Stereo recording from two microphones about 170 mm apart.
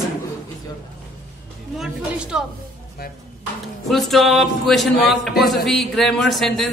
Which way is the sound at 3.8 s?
Centre (ahead or behind).